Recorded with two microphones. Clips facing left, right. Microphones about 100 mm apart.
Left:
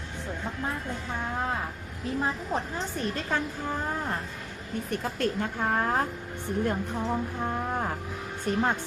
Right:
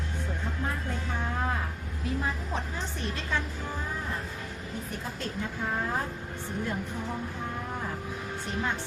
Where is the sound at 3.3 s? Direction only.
45° left (ahead or behind).